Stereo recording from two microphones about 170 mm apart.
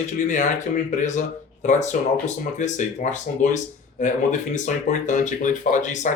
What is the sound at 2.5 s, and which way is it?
Speech, 45° left (ahead or behind).